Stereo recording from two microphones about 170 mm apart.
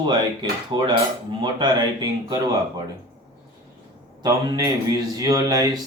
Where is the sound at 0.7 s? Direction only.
30° right (ahead or behind).